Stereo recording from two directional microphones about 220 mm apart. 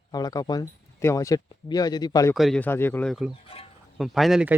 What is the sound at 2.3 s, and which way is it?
Speech, centre (ahead or behind).